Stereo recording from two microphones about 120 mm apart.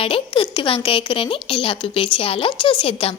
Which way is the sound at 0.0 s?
50° left (ahead or behind).